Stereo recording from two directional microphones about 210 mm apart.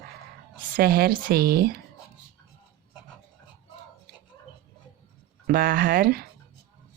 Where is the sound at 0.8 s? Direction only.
45° right (ahead or behind).